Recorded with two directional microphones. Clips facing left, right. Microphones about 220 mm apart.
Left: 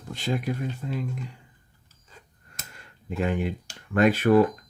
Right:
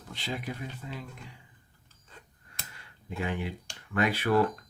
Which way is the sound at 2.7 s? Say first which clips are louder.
Left 7 dB; 45° left (ahead or behind).